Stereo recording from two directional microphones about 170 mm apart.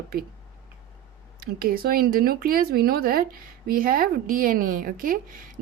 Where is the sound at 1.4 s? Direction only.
60° right (ahead or behind).